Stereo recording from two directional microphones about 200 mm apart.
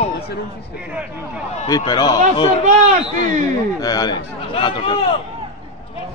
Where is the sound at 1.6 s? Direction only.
20° left (ahead or behind).